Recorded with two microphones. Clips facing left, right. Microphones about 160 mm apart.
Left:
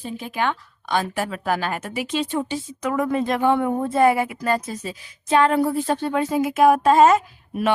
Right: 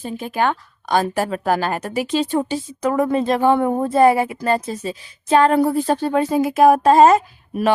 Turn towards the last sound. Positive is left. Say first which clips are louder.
# right 3 dB
turn(degrees=-35)  # may be behind; listen again after turning